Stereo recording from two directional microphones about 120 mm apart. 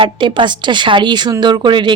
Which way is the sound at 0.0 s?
45° right (ahead or behind).